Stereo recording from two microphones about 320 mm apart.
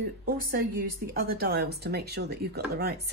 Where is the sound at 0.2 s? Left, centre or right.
Right.